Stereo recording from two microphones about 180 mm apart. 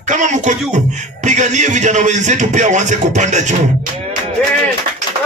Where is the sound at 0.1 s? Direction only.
40° right (ahead or behind).